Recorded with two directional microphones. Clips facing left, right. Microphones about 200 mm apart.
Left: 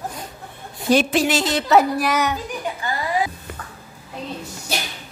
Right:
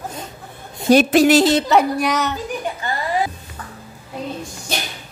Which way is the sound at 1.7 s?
Centre (ahead or behind).